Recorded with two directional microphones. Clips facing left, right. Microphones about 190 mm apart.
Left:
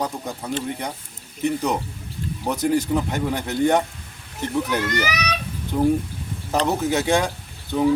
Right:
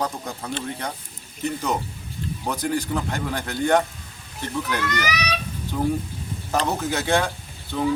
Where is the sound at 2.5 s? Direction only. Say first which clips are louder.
Left 5 dB; 20° left (ahead or behind).